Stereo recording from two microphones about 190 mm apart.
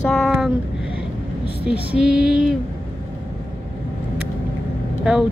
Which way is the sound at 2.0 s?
5° right (ahead or behind).